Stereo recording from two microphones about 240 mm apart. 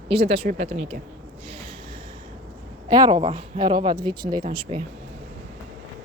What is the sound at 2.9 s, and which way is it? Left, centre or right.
Speech, centre.